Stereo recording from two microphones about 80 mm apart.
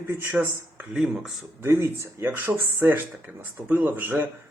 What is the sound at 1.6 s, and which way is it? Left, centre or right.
A man's voice, right.